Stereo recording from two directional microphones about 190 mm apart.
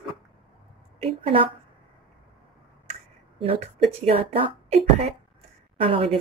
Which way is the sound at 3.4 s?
30° right (ahead or behind).